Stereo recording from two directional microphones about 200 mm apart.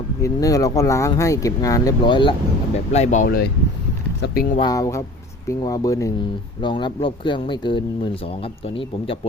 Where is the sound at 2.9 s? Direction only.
35° left (ahead or behind).